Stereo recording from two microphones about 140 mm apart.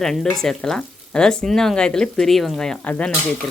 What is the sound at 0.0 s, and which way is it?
Speech, 5° left (ahead or behind).